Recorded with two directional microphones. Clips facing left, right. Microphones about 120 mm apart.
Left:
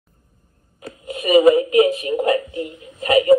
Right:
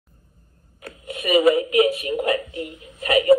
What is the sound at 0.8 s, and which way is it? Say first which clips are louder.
Speech: left 3 dB; 30° left (ahead or behind).